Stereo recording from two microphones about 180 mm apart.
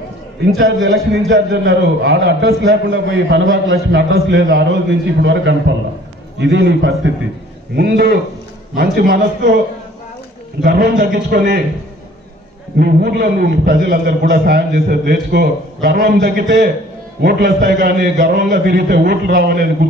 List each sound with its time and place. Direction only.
1.3 s a man's voice: 75° right (ahead or behind)
7.7 s a man's voice: 65° right (ahead or behind)
10.6 s a man's voice: 60° right (ahead or behind)
12.7 s a man's voice: 60° right (ahead or behind)
18.3 s a man's voice: 65° right (ahead or behind)